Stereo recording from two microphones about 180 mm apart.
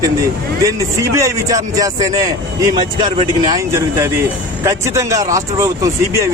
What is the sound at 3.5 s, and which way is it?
A man's voice, 15° right (ahead or behind).